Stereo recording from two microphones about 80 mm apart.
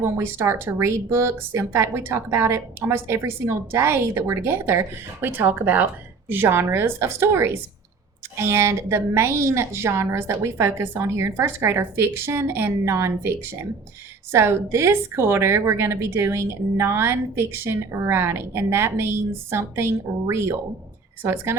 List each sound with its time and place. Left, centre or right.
0.0 s speech: right